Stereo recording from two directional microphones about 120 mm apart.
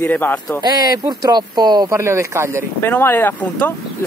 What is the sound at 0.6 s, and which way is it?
Speech, 35° right (ahead or behind).